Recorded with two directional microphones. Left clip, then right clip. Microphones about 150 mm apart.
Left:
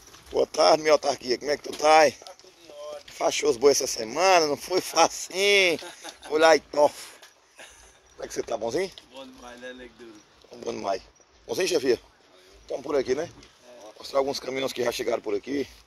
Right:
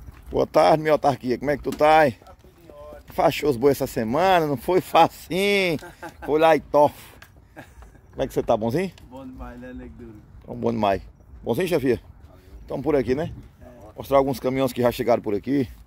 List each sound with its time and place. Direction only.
0.3 s speech: 15° right (ahead or behind)
3.2 s speech: 30° right (ahead or behind); by 7.0 s 15° right (ahead or behind)
8.3 s speech: 35° right (ahead or behind)
9.1 s speech: 5° left (ahead or behind)
10.9 s speech: 15° right (ahead or behind)
15.2 s speech: 35° right (ahead or behind)